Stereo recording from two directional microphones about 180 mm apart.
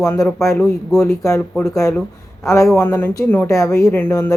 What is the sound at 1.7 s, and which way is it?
Speech, 15° left (ahead or behind).